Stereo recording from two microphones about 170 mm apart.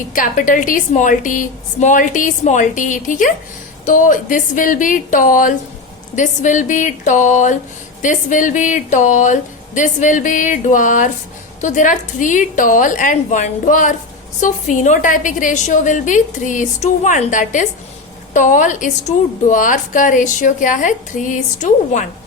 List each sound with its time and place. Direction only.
0.1 s a woman's voice: 50° left (ahead or behind)